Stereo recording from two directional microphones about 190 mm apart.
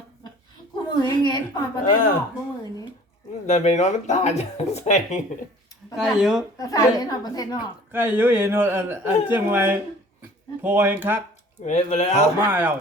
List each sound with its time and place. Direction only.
0.9 s a woman's voice: 25° left (ahead or behind)
3.4 s speech: 35° left (ahead or behind)
6.0 s speech: centre (ahead or behind)
6.6 s a woman's voice: 20° left (ahead or behind)
7.9 s speech: 10° right (ahead or behind)
11.6 s speech: 40° left (ahead or behind)
12.5 s speech: 10° right (ahead or behind)